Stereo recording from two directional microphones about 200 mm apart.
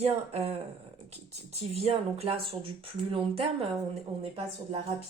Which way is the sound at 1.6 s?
30° right (ahead or behind).